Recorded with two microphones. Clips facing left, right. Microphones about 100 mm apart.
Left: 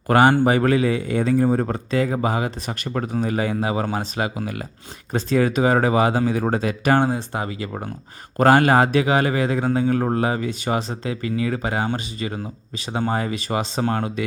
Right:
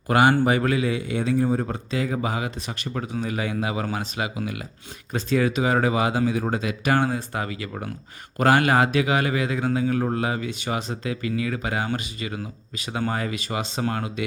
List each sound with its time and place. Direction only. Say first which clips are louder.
0.1 s speech: left 3 dB; 45° left (ahead or behind)
2.0 s a man's voice: left 4 dB; 35° left (ahead or behind)
6.9 s a man's voice: left 3 dB; 25° left (ahead or behind)